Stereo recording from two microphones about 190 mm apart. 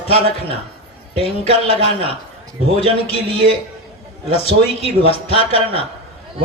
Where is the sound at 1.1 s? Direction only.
30° left (ahead or behind).